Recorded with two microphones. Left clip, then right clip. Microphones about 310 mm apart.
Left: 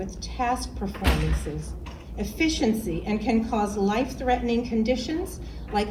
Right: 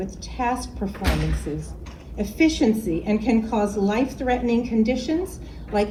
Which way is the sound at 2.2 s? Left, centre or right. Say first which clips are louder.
Right 5 dB; centre.